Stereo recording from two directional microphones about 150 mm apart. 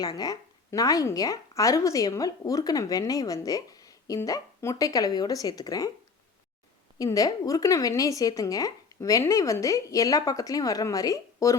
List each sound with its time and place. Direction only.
0.0 s a woman's voice: 25° left (ahead or behind)
7.0 s a woman's voice: 25° left (ahead or behind)